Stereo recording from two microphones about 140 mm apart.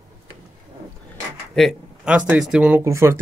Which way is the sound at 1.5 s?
Centre (ahead or behind).